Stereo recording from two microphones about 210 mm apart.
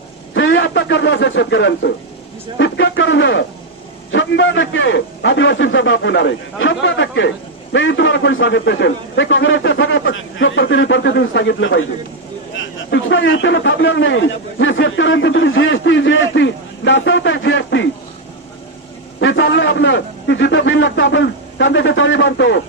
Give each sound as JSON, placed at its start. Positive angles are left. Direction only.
{"t": 0.3, "sound": "a man's voice", "side_deg": 65}
{"t": 19.2, "sound": "a man's voice", "side_deg": 60}